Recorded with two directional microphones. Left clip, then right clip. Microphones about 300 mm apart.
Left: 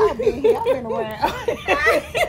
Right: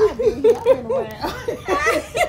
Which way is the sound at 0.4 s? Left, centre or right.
Centre.